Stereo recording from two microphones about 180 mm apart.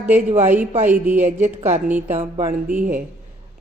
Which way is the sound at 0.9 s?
10° right (ahead or behind).